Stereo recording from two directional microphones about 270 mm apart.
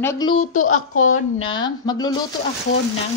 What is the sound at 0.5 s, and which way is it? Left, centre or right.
Speech, left.